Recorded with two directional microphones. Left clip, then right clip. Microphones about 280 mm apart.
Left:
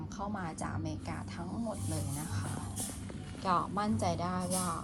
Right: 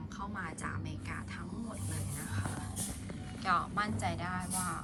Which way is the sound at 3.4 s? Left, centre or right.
Centre.